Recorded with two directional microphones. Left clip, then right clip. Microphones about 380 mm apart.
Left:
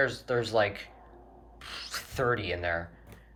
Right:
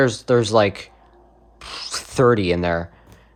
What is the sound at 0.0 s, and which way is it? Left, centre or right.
Speech, centre.